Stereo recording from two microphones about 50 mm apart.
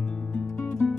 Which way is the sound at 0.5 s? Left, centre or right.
Left.